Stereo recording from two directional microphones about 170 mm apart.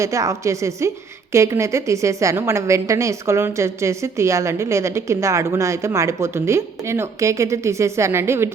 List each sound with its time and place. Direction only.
0.0 s a woman's voice: 20° right (ahead or behind)